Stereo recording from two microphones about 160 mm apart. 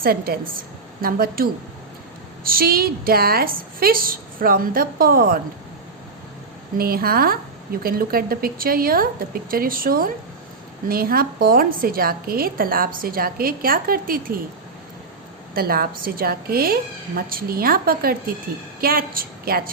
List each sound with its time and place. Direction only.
0.0 s a woman's voice: 70° right (ahead or behind)
6.7 s a woman's voice: 70° right (ahead or behind)
15.5 s a woman's voice: 65° right (ahead or behind)